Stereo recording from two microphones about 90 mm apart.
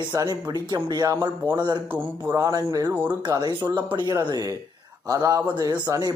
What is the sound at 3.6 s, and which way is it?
Speech, 55° right (ahead or behind).